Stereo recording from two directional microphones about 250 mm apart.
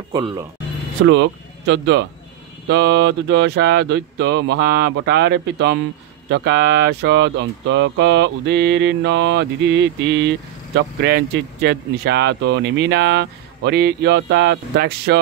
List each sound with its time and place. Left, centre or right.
0.1 s speech: centre
1.0 s speech: right